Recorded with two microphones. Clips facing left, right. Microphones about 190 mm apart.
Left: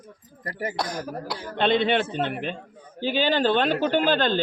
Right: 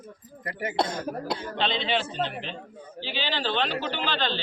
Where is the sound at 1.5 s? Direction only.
55° left (ahead or behind).